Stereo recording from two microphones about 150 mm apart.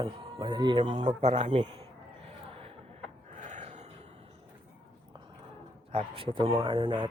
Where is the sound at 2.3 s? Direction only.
40° right (ahead or behind).